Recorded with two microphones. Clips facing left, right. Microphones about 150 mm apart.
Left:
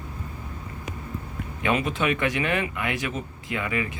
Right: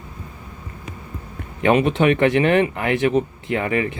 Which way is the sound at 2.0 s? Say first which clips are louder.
Right 9 dB; 35° right (ahead or behind).